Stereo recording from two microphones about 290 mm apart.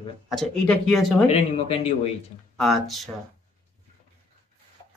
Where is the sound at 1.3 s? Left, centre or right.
Centre.